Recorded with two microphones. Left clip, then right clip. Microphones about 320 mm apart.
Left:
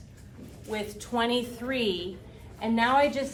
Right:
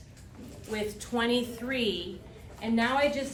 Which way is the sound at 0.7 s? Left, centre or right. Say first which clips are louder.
Left 2 dB; centre.